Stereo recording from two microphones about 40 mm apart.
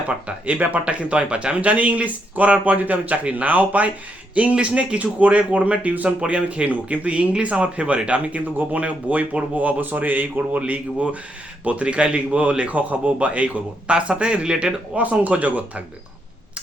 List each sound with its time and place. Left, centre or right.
0.3 s speech: right
4.5 s speech: right
11.6 s speech: right
14.9 s speech: right